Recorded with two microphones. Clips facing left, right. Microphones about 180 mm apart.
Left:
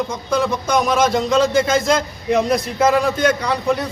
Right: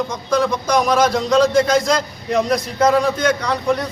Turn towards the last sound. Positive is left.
turn(degrees=5)  # may be behind; listen again after turning